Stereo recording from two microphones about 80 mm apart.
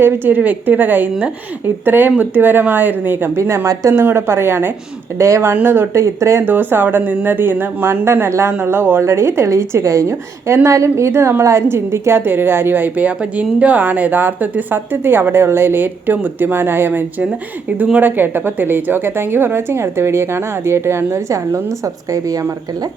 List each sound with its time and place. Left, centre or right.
0.0 s a woman's voice: right
5.5 s speech: right
6.4 s a woman's voice: right